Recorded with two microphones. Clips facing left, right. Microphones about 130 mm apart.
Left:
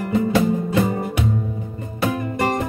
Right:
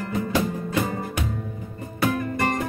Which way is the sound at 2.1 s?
25° left (ahead or behind).